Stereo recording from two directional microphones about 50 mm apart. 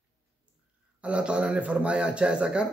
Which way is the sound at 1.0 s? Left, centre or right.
Right.